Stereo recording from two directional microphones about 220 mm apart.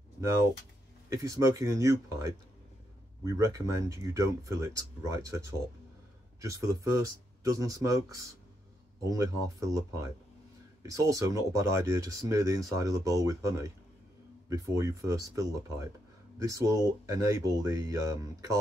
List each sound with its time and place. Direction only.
1.1 s speech: 15° right (ahead or behind)